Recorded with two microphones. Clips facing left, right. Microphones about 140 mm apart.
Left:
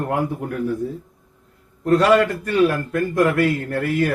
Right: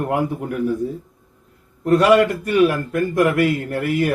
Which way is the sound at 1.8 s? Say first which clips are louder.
Right 1 dB; 15° right (ahead or behind).